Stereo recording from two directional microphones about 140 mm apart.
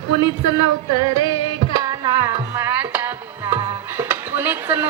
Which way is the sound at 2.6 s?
15° right (ahead or behind).